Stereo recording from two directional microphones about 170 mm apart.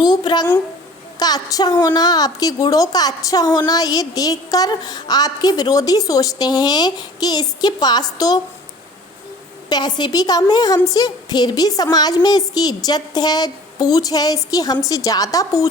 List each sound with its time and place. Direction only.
0.0 s speech: 25° left (ahead or behind)
9.6 s speech: 25° left (ahead or behind)